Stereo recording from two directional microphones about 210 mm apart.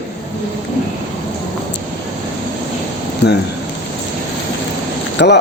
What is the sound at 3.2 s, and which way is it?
Speech, 50° left (ahead or behind).